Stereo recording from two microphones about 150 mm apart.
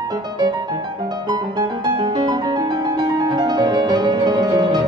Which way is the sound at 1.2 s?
25° right (ahead or behind).